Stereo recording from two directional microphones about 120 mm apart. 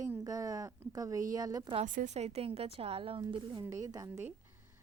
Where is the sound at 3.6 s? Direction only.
30° right (ahead or behind).